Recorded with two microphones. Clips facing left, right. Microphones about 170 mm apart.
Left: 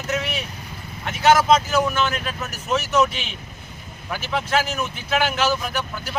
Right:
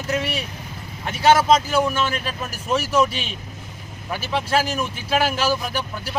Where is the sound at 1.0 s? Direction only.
30° right (ahead or behind).